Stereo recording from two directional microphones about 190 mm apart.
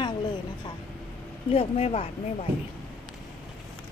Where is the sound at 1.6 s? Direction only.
35° left (ahead or behind).